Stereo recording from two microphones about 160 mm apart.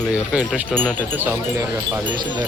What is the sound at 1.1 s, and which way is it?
Speech, 15° right (ahead or behind).